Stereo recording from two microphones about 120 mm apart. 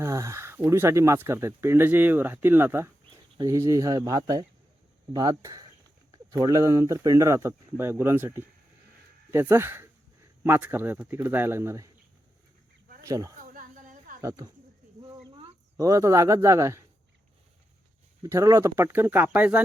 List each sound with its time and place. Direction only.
0.0 s speech: 25° right (ahead or behind)
13.0 s speech: 25° right (ahead or behind)
13.4 s a sound: 90° right
14.2 s speech: 25° right (ahead or behind)
15.8 s speech: 25° right (ahead or behind)
18.2 s speech: 25° right (ahead or behind)